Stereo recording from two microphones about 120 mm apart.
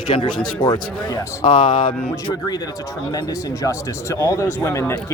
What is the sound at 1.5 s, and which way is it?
Speech, 90° left.